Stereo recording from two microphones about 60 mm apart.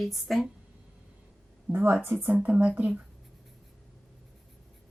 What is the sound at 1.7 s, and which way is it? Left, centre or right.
Speech, right.